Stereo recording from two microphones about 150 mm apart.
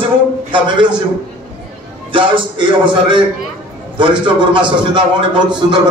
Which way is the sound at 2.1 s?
35° right (ahead or behind).